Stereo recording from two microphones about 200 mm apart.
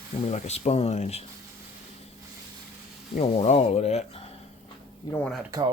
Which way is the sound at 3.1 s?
35° left (ahead or behind).